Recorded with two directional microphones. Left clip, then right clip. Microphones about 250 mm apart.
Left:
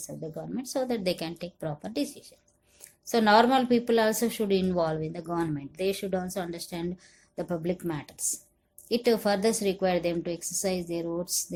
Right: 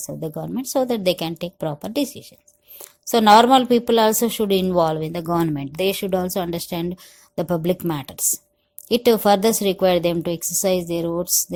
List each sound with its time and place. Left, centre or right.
0.0 s a woman's voice: right